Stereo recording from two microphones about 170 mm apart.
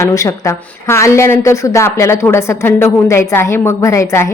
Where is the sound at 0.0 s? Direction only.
20° left (ahead or behind).